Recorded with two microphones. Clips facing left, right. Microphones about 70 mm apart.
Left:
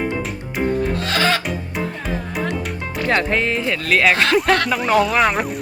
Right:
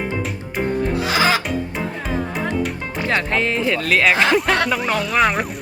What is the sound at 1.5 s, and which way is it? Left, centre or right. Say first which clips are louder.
Music: right 1 dB; centre.